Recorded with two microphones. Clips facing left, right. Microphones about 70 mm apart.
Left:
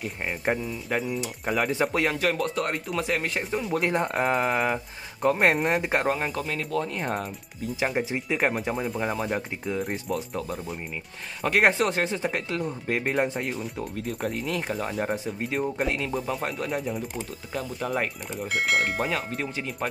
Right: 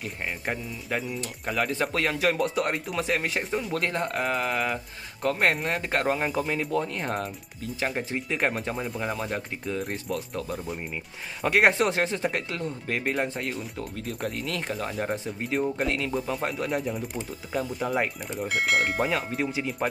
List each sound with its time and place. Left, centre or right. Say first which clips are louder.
0.8 s speech: left 2 dB; centre
2.1 s speech: right 1 dB; centre
3.7 s speech: left 5 dB; centre
6.0 s speech: right 1 dB; centre